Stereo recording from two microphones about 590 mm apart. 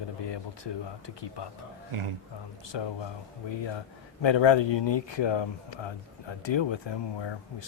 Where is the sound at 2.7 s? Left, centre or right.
Left.